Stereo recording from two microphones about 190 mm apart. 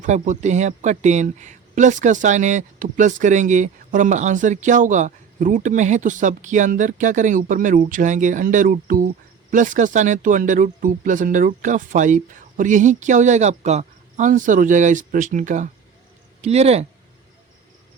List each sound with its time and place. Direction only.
0.0 s speech: 40° right (ahead or behind)